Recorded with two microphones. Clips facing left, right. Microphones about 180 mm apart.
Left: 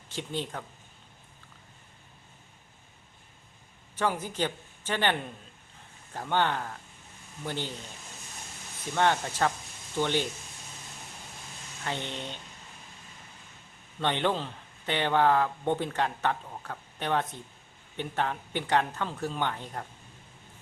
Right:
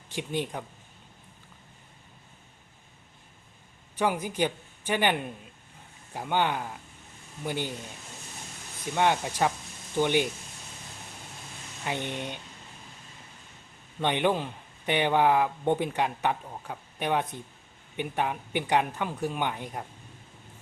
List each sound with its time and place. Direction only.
0.1 s speech: 15° right (ahead or behind)
3.9 s speech: 10° right (ahead or behind)
8.8 s speech: 10° right (ahead or behind)
11.9 s speech: 15° right (ahead or behind)
14.0 s speech: 15° right (ahead or behind)